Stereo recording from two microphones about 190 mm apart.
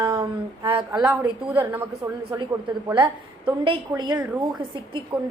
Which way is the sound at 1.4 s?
10° right (ahead or behind).